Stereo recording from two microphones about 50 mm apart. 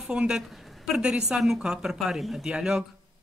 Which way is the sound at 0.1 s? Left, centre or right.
Centre.